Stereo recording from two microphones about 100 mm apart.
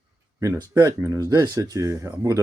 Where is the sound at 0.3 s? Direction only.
30° right (ahead or behind).